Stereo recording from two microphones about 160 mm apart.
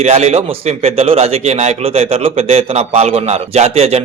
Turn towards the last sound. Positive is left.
turn(degrees=-40)  # may be behind; listen again after turning